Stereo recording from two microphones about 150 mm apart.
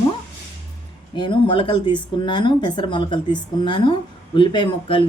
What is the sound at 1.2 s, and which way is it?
Speech, 35° left (ahead or behind).